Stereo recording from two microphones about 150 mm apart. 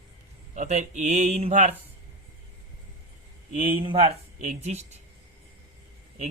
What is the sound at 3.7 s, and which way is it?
Speech, 35° right (ahead or behind).